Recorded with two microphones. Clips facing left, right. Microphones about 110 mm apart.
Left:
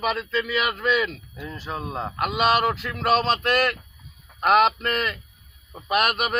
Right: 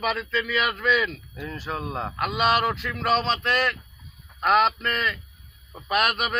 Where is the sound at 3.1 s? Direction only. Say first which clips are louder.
Left 4 dB; 50° left (ahead or behind).